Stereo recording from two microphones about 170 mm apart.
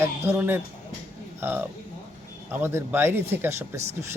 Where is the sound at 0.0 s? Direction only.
10° right (ahead or behind).